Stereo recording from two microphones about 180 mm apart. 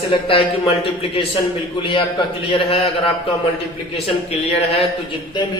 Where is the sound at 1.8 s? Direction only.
30° left (ahead or behind).